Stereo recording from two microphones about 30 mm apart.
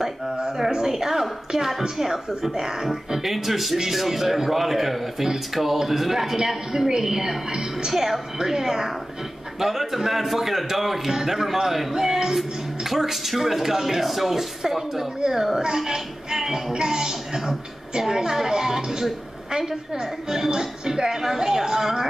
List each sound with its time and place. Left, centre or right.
0.7 s a woman's voice: right
3.2 s a woman's voice: centre
16.7 s a woman's voice: right